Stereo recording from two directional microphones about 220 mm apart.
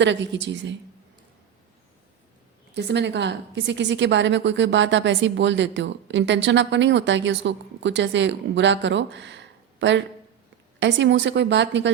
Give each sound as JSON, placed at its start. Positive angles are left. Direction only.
{"t": 0.0, "sound": "a woman's voice", "side_deg": -55}
{"t": 2.7, "sound": "a woman's voice", "side_deg": -50}